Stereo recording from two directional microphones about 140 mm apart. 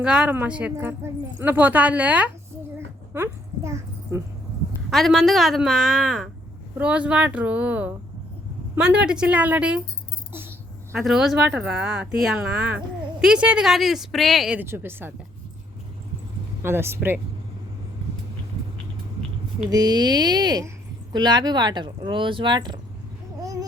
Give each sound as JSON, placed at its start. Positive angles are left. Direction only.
{"t": 0.0, "sound": "a woman's voice", "side_deg": -5}
{"t": 2.7, "sound": "a sound", "side_deg": -15}
{"t": 4.9, "sound": "a woman's voice", "side_deg": 0}
{"t": 10.9, "sound": "speech", "side_deg": -5}
{"t": 16.6, "sound": "a woman's voice", "side_deg": -15}
{"t": 19.7, "sound": "speech", "side_deg": -30}
{"t": 23.4, "sound": "a sound", "side_deg": -25}